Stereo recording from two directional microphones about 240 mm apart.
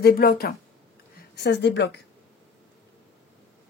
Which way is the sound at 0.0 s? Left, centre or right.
Left.